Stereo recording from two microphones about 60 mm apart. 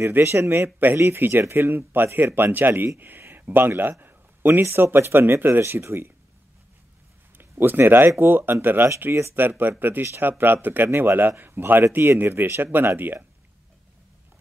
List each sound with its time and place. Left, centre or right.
0.1 s speech: right
4.0 s a sound: right
4.9 s speech: right
5.6 s speech: right
7.3 s speech: right
9.1 s speech: right
9.4 s speech: right